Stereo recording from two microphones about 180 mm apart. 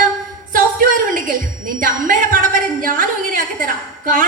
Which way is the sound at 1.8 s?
50° right (ahead or behind).